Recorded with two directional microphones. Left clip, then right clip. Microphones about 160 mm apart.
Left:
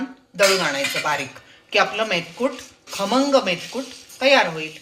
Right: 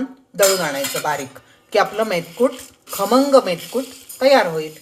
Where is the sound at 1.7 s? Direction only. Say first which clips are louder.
Right 2 dB; 55° right (ahead or behind).